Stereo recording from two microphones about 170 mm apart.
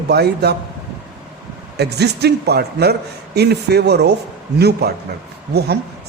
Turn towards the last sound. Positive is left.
turn(degrees=-75)  # may be behind; listen again after turning